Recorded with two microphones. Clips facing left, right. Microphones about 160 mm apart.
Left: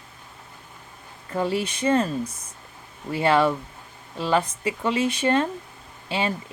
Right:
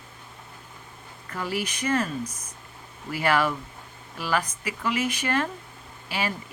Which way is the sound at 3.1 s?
25° left (ahead or behind).